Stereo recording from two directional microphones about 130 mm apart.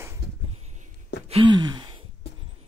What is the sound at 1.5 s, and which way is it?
Gasp, 35° right (ahead or behind).